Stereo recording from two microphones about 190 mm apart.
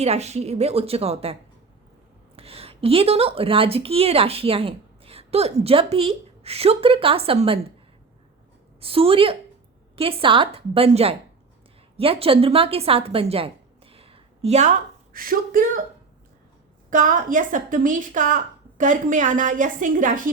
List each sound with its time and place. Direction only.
0.0 s a woman's voice: 35° right (ahead or behind)
8.8 s a woman's voice: 30° right (ahead or behind); by 15.8 s 50° right (ahead or behind)
16.9 s a woman's voice: 45° right (ahead or behind)